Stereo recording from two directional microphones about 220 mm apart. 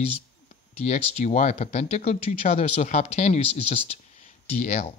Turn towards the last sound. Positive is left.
turn(degrees=30)  # may be behind; listen again after turning